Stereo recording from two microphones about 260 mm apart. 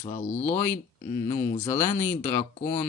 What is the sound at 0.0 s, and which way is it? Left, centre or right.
Speech, left.